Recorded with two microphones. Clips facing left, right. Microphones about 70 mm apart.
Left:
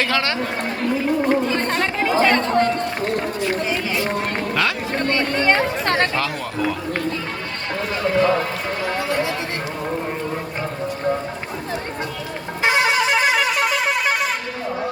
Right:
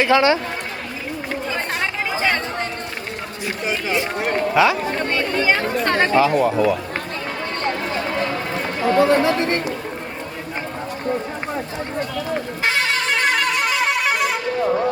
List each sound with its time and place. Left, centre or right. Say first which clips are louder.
0.0 s speech: right 6 dB; centre
1.5 s speech: left 3 dB; centre
3.4 s speech: left 2 dB; centre
5.1 s speech: left 2 dB; centre
9.0 s speech: right 10 dB; right
12.6 s music: left 4 dB; centre